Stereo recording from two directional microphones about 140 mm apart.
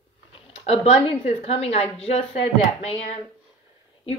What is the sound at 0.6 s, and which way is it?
A woman's voice, 45° left (ahead or behind).